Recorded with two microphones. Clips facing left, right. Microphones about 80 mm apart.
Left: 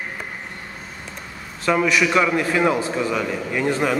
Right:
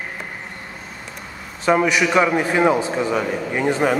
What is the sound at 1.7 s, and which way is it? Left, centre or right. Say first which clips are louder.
A man's voice: right 2 dB; centre.